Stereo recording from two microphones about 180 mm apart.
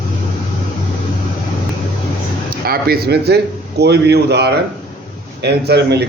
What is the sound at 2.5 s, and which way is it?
A man's voice, 60° right (ahead or behind).